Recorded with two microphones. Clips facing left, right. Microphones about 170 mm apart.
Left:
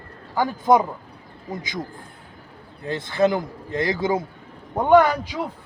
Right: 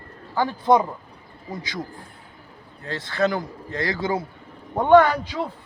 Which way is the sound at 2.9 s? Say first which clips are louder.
Left 3 dB; 20° left (ahead or behind).